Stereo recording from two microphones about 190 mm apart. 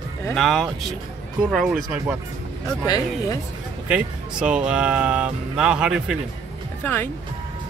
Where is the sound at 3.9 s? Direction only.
5° right (ahead or behind).